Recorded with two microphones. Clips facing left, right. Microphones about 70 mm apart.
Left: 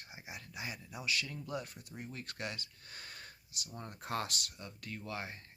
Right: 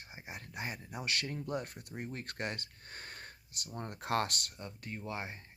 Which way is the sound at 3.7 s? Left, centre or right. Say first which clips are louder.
Right 5 dB; right.